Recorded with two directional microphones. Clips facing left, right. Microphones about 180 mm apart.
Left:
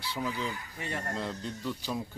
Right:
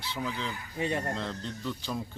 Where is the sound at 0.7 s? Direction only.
20° right (ahead or behind).